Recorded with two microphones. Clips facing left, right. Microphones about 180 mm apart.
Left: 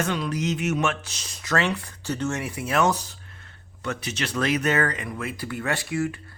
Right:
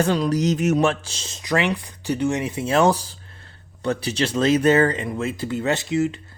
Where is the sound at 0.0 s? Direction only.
35° right (ahead or behind).